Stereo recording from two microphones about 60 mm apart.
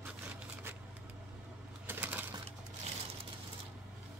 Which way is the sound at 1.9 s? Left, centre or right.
Right.